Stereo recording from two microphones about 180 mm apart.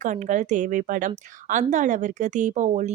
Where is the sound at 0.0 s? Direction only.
45° right (ahead or behind).